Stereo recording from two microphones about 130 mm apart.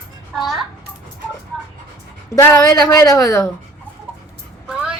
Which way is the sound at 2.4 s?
25° left (ahead or behind).